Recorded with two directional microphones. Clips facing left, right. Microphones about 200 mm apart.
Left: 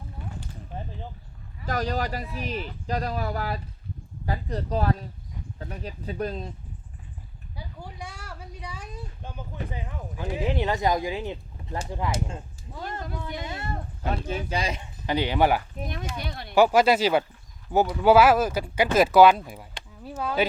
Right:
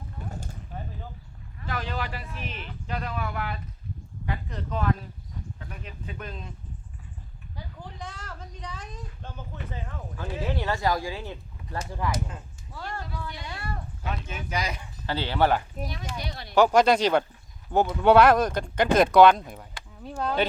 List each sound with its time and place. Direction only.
0.3 s a sound: 45° right (ahead or behind)
1.6 s speech: 40° left (ahead or behind)
7.5 s a sound: 10° left (ahead or behind)
9.7 s speech: 15° left (ahead or behind)
14.1 s speech: 35° left (ahead or behind); by 15.6 s 15° left (ahead or behind)
15.9 s speech: 55° left (ahead or behind)
16.6 s speech: 5° left (ahead or behind)